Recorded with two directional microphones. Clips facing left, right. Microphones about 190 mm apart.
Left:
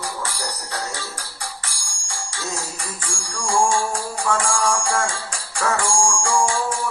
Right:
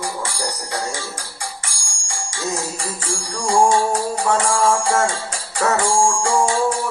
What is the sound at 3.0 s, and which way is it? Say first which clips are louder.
Music: right 5 dB; 25° right (ahead or behind).